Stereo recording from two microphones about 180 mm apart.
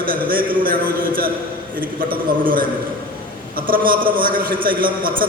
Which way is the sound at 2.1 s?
50° right (ahead or behind).